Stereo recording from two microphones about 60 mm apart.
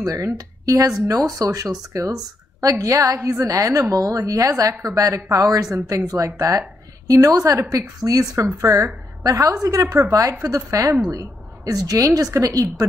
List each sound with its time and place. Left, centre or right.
0.0 s a woman's voice: right
8.5 s a woman's voice: right
9.2 s a woman's voice: right
11.1 s a woman's voice: right